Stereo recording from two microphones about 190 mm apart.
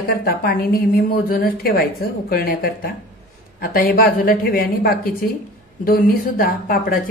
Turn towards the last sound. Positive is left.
turn(degrees=50)  # may be behind; listen again after turning